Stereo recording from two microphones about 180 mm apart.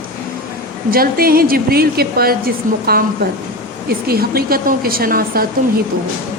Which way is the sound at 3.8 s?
60° right (ahead or behind).